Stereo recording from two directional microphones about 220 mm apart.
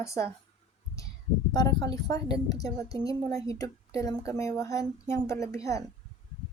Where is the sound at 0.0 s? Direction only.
15° left (ahead or behind).